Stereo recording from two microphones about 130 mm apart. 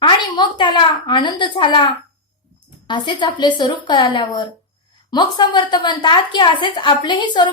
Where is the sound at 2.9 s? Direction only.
35° left (ahead or behind).